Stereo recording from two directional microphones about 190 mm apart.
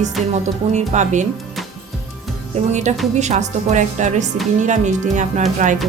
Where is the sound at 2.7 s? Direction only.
40° right (ahead or behind).